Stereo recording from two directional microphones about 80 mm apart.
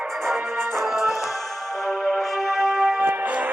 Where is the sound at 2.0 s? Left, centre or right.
Centre.